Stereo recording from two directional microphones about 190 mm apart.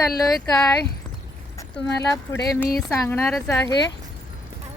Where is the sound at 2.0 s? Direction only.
15° left (ahead or behind).